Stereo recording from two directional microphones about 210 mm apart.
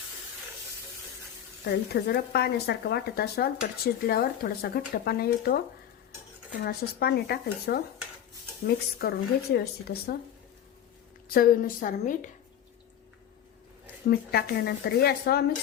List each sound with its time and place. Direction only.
1.6 s speech: 50° left (ahead or behind)
6.7 s speech: 50° left (ahead or behind)
11.3 s a woman's voice: 45° left (ahead or behind)
14.1 s speech: 50° left (ahead or behind)